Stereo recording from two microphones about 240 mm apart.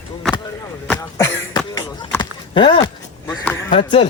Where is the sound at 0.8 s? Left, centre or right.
Centre.